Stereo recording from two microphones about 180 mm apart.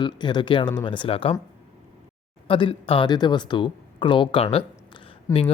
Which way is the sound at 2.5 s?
30° left (ahead or behind).